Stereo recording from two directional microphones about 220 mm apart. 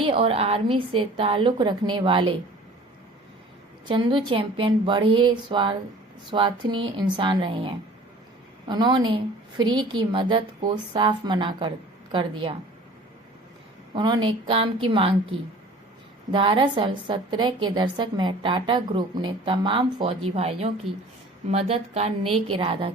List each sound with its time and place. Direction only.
0.0 s a woman's voice: 25° right (ahead or behind)
3.8 s a woman's voice: 20° right (ahead or behind)
13.9 s a woman's voice: 20° right (ahead or behind)